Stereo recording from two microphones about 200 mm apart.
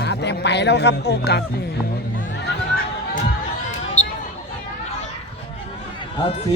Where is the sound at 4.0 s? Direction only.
35° left (ahead or behind).